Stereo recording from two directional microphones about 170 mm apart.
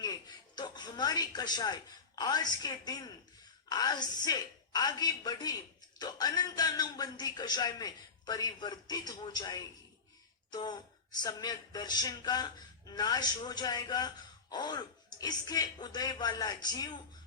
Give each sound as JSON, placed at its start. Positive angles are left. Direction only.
{"t": 0.0, "sound": "a woman's voice", "side_deg": 25}